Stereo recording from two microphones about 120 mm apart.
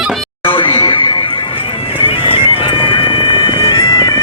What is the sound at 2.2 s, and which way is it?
Bagpipes, 50° left (ahead or behind).